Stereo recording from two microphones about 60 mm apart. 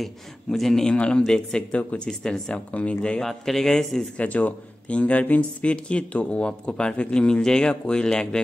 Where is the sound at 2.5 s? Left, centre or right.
Left.